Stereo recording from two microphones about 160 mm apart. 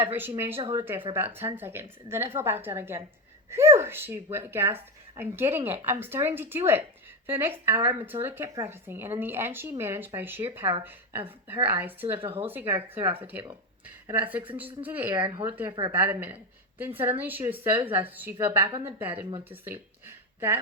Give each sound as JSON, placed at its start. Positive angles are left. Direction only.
{"t": 0.2, "sound": "a woman's voice", "side_deg": -15}
{"t": 15.1, "sound": "speech", "side_deg": -25}
{"t": 15.4, "sound": "speech", "side_deg": -15}
{"t": 19.5, "sound": "a sound", "side_deg": -15}